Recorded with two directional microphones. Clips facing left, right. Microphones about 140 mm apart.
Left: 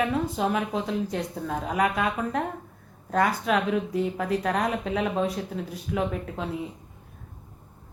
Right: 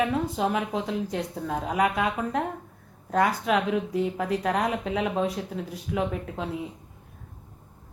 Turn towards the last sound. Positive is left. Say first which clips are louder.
# even
turn(degrees=-15)  # may be behind; listen again after turning